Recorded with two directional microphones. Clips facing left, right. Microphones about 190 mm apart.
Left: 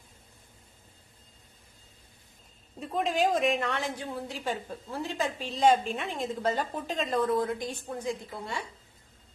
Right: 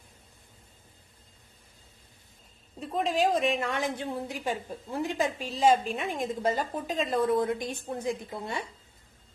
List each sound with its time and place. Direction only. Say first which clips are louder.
2.8 s a woman's voice: right 1 dB; centre (ahead or behind)
3.7 s a woman's voice: right 2 dB; 15° right (ahead or behind)
5.5 s a woman's voice: left 1 dB; 5° right (ahead or behind)
7.2 s a woman's voice: right 2 dB; 25° right (ahead or behind)